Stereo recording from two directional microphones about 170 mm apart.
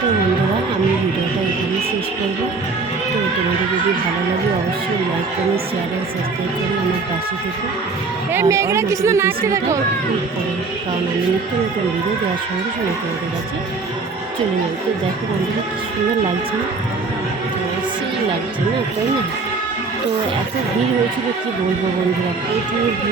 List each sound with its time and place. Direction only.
8.3 s a woman's voice: 15° right (ahead or behind)